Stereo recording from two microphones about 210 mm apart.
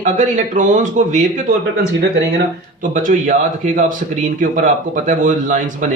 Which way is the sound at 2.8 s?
40° right (ahead or behind).